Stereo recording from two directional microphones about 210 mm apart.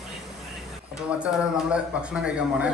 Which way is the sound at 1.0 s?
5° right (ahead or behind).